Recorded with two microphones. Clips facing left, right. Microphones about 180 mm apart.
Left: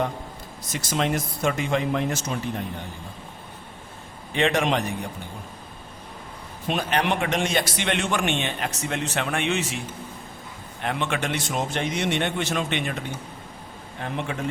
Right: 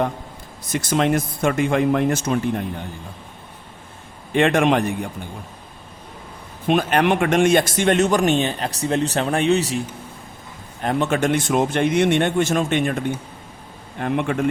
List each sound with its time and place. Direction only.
0.7 s speech: 55° right (ahead or behind)
4.4 s a man's voice: 55° right (ahead or behind)
6.7 s a man's voice: 55° right (ahead or behind); by 9.8 s 35° right (ahead or behind)
10.8 s a man's voice: 40° right (ahead or behind)